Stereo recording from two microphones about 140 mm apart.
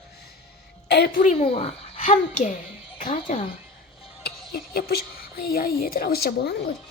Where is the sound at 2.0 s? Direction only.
60° left (ahead or behind).